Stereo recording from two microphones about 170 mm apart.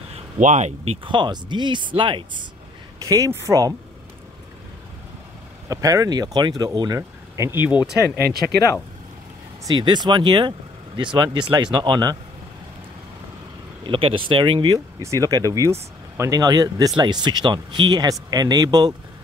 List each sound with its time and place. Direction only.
0.1 s speech: 45° right (ahead or behind)
3.0 s speech: 20° right (ahead or behind)
5.7 s speech: 20° right (ahead or behind)
7.9 s speech: 70° right (ahead or behind)
9.7 s speech: 25° right (ahead or behind)
13.8 s speech: 30° right (ahead or behind)